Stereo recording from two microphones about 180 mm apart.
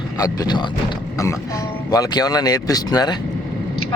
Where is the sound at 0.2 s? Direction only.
20° left (ahead or behind).